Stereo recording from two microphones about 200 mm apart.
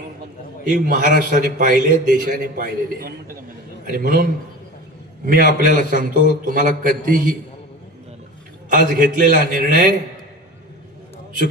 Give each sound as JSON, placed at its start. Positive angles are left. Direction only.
{"t": 0.7, "sound": "a man's voice", "side_deg": -40}
{"t": 8.7, "sound": "a man's voice", "side_deg": -45}